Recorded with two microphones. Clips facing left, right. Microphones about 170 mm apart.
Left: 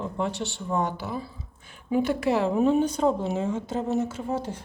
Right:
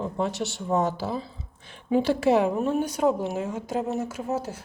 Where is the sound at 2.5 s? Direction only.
Centre (ahead or behind).